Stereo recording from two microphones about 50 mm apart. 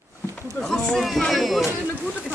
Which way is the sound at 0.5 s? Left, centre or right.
Centre.